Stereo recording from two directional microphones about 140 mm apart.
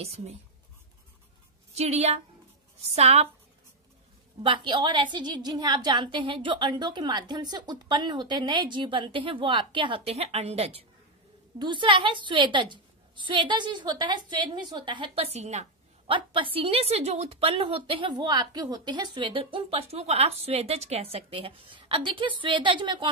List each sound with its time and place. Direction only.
0.0 s a woman's voice: 50° right (ahead or behind)
1.8 s a woman's voice: 50° right (ahead or behind)
4.4 s a woman's voice: 35° right (ahead or behind)
11.5 s a woman's voice: 35° right (ahead or behind)
15.3 s a woman's voice: 55° right (ahead or behind)
16.1 s a woman's voice: 35° right (ahead or behind)